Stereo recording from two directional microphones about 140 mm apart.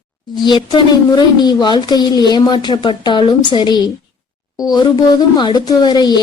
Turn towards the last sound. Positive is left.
turn(degrees=30)  # may be behind; listen again after turning